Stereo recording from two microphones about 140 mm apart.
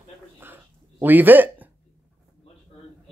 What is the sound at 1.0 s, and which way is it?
Speech, 15° right (ahead or behind).